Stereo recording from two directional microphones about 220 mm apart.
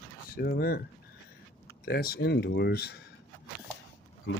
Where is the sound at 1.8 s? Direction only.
45° left (ahead or behind).